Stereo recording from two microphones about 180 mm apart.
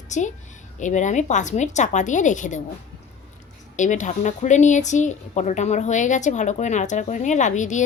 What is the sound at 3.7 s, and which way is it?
A woman's voice, 45° left (ahead or behind).